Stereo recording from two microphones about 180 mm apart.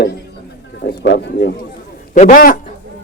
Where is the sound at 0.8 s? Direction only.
70° left (ahead or behind).